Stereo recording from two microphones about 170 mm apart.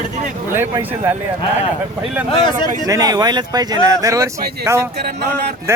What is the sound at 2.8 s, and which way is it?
Speech, 20° right (ahead or behind).